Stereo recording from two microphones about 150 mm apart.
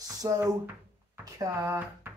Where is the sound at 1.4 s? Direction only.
20° right (ahead or behind).